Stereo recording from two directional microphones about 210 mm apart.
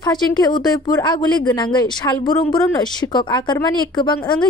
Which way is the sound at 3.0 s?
20° left (ahead or behind).